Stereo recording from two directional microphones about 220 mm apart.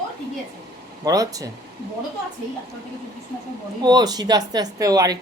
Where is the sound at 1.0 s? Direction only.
15° right (ahead or behind).